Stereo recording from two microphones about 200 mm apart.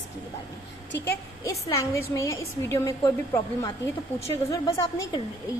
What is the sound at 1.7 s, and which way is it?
Speech, 15° left (ahead or behind).